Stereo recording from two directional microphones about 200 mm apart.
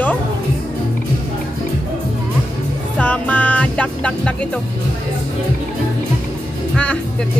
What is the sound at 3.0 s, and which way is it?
Music, 5° left (ahead or behind).